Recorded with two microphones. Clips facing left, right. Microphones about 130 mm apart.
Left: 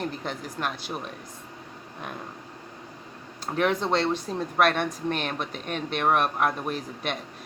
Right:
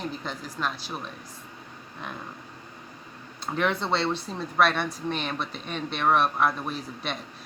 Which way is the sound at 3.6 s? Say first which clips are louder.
Left 2 dB; 45° left (ahead or behind).